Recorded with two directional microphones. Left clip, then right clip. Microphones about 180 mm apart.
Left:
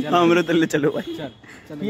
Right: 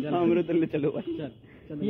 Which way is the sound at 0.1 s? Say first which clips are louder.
Left 8 dB; 70° left (ahead or behind).